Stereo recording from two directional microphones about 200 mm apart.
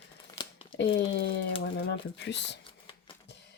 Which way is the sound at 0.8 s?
60° left (ahead or behind).